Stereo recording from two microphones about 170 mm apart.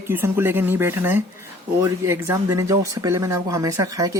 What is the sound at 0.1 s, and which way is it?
Speech, 15° right (ahead or behind).